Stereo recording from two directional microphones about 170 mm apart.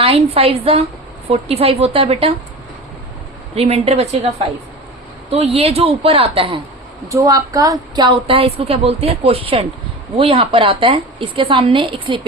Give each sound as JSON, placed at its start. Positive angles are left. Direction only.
{"t": 0.0, "sound": "a woman's voice", "side_deg": -35}
{"t": 3.5, "sound": "a woman's voice", "side_deg": -35}
{"t": 7.1, "sound": "a woman's voice", "side_deg": -20}